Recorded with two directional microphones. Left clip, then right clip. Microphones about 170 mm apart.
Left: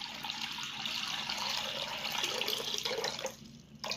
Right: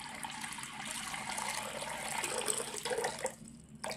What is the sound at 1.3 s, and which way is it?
Water, 20° right (ahead or behind).